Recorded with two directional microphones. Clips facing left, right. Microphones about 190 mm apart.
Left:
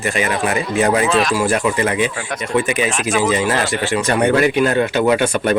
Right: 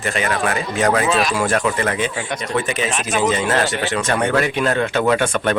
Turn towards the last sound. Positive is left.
turn(degrees=15)  # may be behind; listen again after turning